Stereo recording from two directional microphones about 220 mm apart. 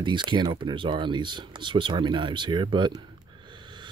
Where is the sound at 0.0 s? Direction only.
20° right (ahead or behind).